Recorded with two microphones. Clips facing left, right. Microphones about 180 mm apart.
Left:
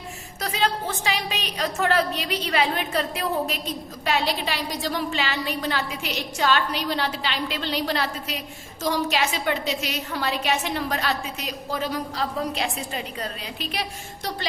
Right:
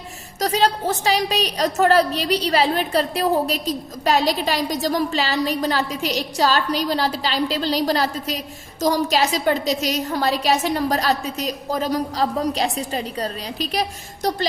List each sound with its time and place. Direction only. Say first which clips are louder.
0.3 s a woman's voice: right 6 dB; 40° right (ahead or behind)